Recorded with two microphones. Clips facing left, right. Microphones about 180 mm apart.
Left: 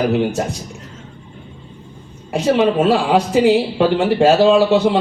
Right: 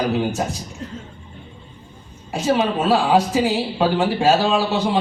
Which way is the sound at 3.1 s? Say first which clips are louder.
Left 4 dB; 70° left (ahead or behind).